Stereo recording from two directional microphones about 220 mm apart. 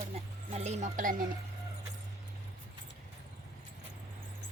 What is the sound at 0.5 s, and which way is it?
Speech, 30° right (ahead or behind).